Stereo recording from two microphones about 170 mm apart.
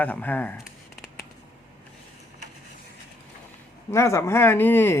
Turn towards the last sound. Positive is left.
turn(degrees=15)  # may be behind; listen again after turning